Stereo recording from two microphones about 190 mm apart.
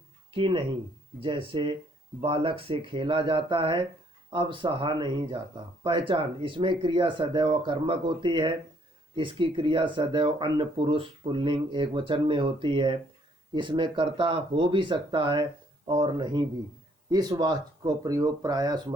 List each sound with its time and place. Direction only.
0.3 s speech: 25° right (ahead or behind)